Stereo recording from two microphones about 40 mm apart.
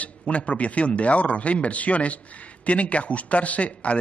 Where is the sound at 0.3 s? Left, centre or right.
Left.